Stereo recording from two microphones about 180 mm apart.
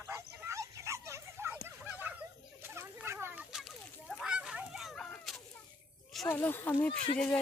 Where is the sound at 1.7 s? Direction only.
10° right (ahead or behind).